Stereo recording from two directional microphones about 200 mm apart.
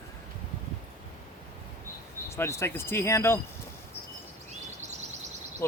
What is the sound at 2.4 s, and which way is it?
Speech, 15° left (ahead or behind).